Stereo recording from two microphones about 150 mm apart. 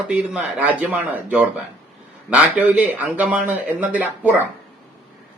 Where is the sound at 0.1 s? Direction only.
10° right (ahead or behind).